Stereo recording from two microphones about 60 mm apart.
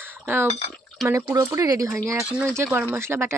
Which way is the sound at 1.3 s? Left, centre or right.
Right.